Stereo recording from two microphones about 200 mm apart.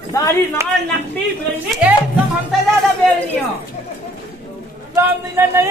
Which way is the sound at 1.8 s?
5° right (ahead or behind).